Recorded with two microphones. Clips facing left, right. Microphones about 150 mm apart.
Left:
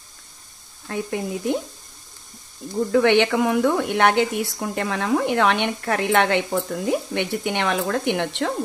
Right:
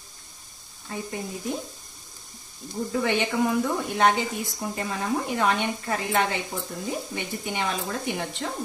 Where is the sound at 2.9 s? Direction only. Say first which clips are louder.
Left 8 dB; 75° left (ahead or behind).